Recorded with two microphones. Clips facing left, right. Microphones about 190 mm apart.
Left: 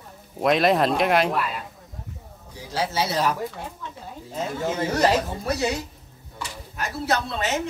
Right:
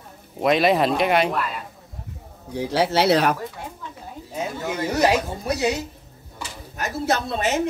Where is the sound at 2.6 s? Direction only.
65° right (ahead or behind).